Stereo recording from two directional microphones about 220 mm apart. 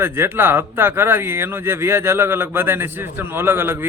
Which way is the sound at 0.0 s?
10° right (ahead or behind).